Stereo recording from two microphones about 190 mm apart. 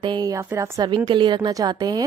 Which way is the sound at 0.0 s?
20° right (ahead or behind).